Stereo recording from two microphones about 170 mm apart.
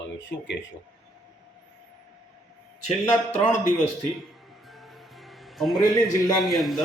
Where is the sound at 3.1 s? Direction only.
5° left (ahead or behind).